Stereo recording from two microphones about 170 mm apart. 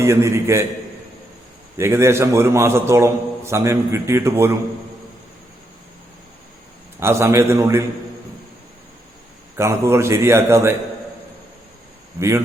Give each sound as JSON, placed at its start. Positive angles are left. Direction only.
{"t": 0.0, "sound": "a man's voice", "side_deg": -15}
{"t": 1.8, "sound": "a man's voice", "side_deg": -15}
{"t": 7.0, "sound": "a man's voice", "side_deg": -15}
{"t": 9.6, "sound": "a man's voice", "side_deg": -15}